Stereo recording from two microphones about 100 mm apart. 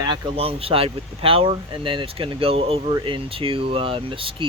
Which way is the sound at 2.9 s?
55° right (ahead or behind).